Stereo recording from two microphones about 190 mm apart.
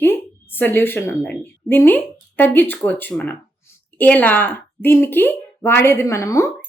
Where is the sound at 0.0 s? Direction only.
10° left (ahead or behind).